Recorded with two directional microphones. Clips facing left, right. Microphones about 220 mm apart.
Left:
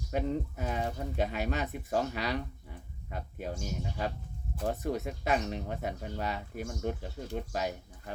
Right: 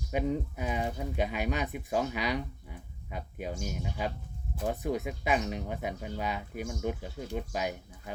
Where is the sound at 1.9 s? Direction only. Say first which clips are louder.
Right 1 dB; 10° right (ahead or behind).